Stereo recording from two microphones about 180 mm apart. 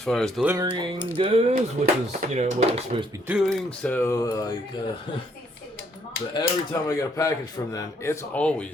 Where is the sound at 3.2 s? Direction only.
Centre (ahead or behind); by 4.5 s 20° left (ahead or behind).